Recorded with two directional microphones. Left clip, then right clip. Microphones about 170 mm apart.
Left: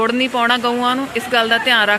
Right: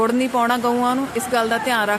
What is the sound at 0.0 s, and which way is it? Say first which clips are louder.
Speech: left 2 dB; 10° right (ahead or behind).